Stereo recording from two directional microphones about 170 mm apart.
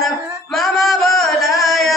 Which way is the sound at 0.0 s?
Centre (ahead or behind).